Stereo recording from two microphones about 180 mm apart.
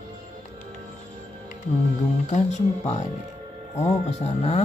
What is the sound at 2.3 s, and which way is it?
Speech, 40° left (ahead or behind).